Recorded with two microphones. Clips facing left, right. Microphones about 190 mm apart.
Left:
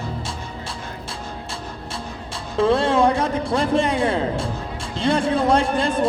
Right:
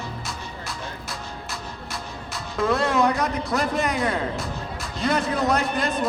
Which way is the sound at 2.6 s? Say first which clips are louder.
Left 4 dB; 30° left (ahead or behind).